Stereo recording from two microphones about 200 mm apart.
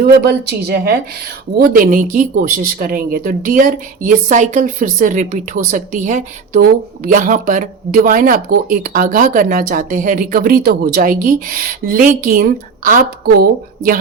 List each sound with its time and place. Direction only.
0.0 s speech: 50° right (ahead or behind)